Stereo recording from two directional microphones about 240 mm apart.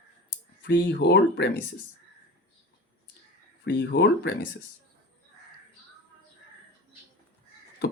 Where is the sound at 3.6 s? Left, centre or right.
Left.